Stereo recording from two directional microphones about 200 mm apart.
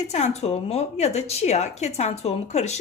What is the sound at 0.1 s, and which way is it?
A woman's voice, 35° left (ahead or behind).